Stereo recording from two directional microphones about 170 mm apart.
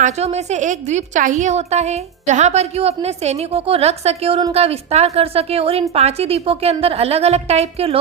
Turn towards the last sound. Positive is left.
turn(degrees=-35)  # may be behind; listen again after turning